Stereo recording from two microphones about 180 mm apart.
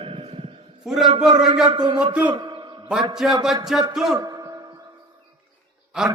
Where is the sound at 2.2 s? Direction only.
25° right (ahead or behind).